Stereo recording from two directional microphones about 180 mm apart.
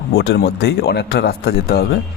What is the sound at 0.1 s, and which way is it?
A man's voice, 65° left (ahead or behind).